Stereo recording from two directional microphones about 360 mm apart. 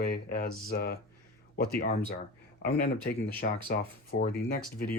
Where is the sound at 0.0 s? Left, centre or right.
Left.